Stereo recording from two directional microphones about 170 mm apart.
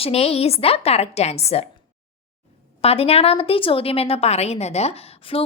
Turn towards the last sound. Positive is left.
turn(degrees=35)  # may be behind; listen again after turning